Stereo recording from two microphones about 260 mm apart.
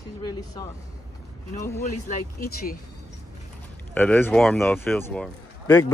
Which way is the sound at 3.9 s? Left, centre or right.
Centre.